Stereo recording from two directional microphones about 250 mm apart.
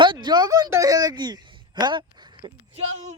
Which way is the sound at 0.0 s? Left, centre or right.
Centre.